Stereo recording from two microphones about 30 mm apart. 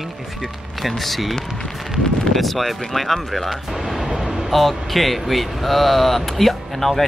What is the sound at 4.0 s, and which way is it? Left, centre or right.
Vehicle, centre.